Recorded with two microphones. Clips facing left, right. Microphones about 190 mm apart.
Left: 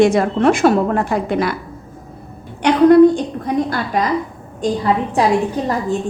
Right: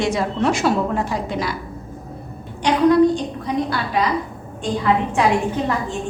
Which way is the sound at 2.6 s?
60° left (ahead or behind).